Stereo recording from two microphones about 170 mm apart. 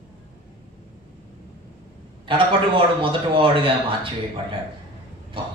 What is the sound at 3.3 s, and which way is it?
Speech, 30° right (ahead or behind).